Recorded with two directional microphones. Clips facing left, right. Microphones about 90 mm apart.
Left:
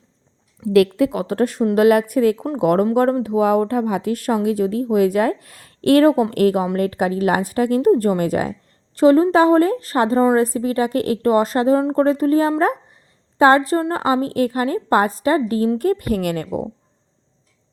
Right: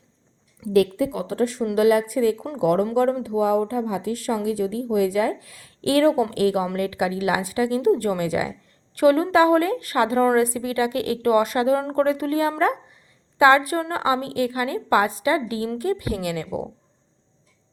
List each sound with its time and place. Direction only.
0.7 s a woman's voice: 70° left (ahead or behind); by 8.5 s 45° left (ahead or behind)
9.0 s a woman's voice: 30° left (ahead or behind); by 16.5 s 50° left (ahead or behind)